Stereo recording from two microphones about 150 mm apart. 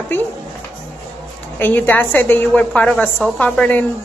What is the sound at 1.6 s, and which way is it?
A woman's voice, 10° left (ahead or behind).